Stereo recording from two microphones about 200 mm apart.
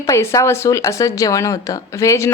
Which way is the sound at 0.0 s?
15° left (ahead or behind).